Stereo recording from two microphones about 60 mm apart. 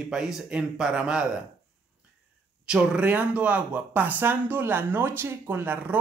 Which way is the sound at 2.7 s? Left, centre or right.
Right.